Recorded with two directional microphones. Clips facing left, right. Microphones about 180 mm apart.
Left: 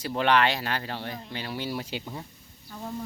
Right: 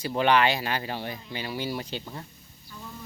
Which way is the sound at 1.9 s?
10° left (ahead or behind).